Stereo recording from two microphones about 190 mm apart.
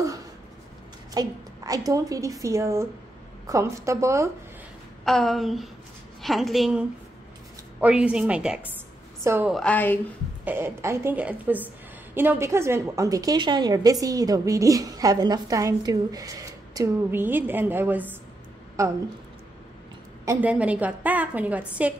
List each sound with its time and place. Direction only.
1.1 s a woman's voice: 20° right (ahead or behind)
5.0 s a woman's voice: centre (ahead or behind)
9.5 s a woman's voice: 5° left (ahead or behind)
10.4 s a woman's voice: 10° right (ahead or behind)
20.2 s a woman's voice: 10° right (ahead or behind)